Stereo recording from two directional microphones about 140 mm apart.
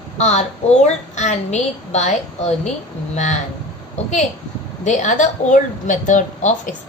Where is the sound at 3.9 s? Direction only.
55° left (ahead or behind).